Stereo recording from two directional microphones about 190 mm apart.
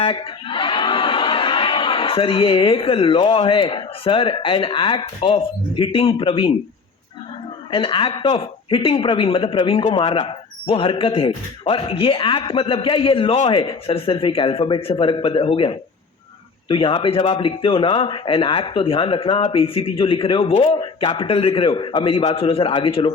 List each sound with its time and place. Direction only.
0.0 s a man's voice: 25° left (ahead or behind)
7.7 s speech: 30° left (ahead or behind)